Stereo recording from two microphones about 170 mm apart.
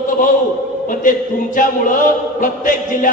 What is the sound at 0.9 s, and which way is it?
Chant, 50° left (ahead or behind).